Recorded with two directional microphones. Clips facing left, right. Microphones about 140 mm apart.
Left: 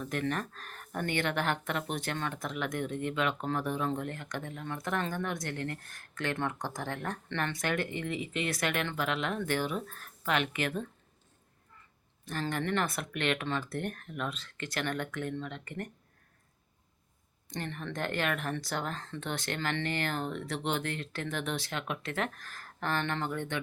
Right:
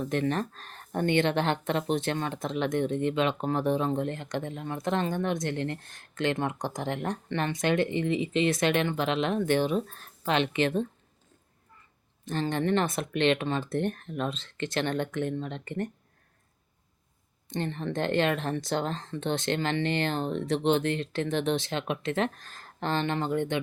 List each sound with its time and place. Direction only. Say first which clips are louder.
0.0 s speech: right 5 dB; 25° right (ahead or behind)
12.2 s speech: right 5 dB; 25° right (ahead or behind)
17.5 s speech: right 7 dB; 25° right (ahead or behind)